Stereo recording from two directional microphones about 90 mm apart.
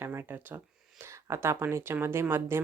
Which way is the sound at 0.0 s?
30° right (ahead or behind).